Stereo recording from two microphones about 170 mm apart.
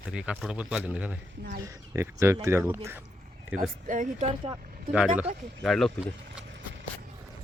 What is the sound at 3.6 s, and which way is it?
Speech, 50° right (ahead or behind).